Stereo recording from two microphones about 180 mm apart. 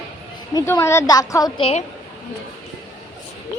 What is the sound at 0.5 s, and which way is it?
A woman's voice, 15° left (ahead or behind).